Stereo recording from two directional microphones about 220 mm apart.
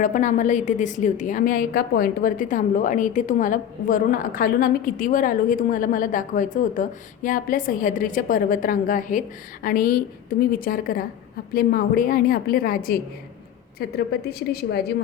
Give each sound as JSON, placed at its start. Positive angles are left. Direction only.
{"t": 0.0, "sound": "a woman's voice", "side_deg": 35}